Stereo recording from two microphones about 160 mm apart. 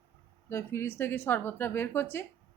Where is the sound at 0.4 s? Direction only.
15° left (ahead or behind).